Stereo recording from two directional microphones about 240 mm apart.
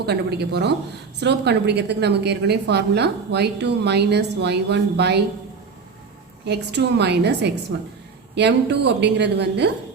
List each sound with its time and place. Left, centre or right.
0.0 s a woman's voice: right
6.4 s a woman's voice: right